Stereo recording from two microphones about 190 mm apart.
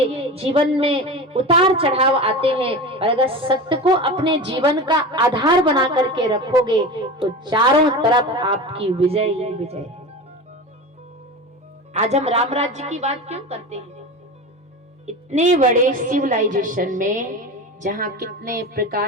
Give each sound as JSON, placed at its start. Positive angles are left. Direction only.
{"t": 0.1, "sound": "a woman's voice", "side_deg": -30}
{"t": 11.9, "sound": "a woman's voice", "side_deg": -35}
{"t": 15.0, "sound": "a woman's voice", "side_deg": -35}
{"t": 18.2, "sound": "a woman's voice", "side_deg": -55}